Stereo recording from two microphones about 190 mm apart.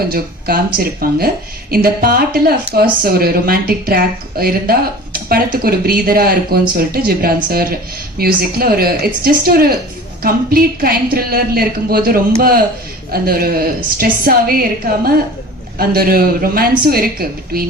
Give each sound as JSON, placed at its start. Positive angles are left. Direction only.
{"t": 0.1, "sound": "a woman's voice", "side_deg": -50}